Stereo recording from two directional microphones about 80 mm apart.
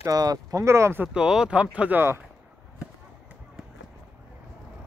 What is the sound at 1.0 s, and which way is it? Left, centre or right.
Speech, centre.